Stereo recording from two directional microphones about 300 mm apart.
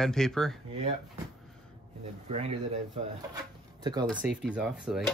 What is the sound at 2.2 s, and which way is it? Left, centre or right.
Speech, right.